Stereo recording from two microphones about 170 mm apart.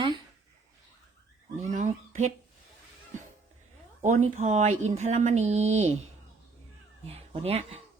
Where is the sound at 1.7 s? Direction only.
45° right (ahead or behind).